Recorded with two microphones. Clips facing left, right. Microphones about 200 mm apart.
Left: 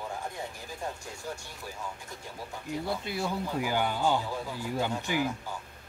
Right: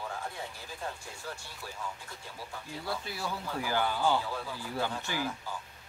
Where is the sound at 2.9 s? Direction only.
20° left (ahead or behind).